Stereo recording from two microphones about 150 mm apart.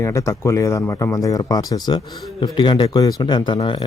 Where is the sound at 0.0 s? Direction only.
20° left (ahead or behind).